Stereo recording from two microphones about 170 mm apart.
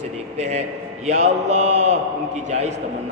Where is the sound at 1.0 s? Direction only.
40° right (ahead or behind).